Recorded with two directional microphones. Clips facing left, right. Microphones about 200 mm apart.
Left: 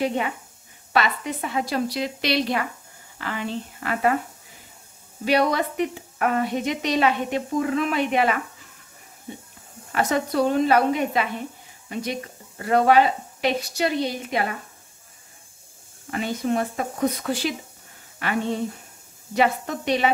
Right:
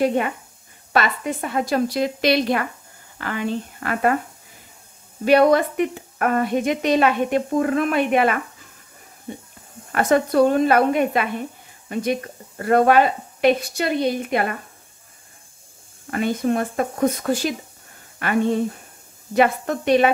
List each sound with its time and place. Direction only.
0.0 s a woman's voice: 50° right (ahead or behind)
5.2 s a woman's voice: 50° right (ahead or behind)
9.9 s a woman's voice: 50° right (ahead or behind)
16.1 s a woman's voice: 50° right (ahead or behind)